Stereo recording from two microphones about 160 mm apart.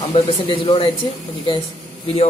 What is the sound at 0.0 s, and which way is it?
Speech, 40° left (ahead or behind).